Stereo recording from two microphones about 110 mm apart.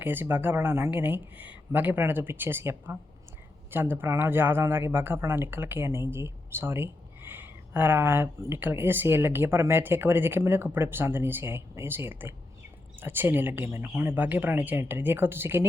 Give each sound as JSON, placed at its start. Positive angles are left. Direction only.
{"t": 0.0, "sound": "speech", "side_deg": -20}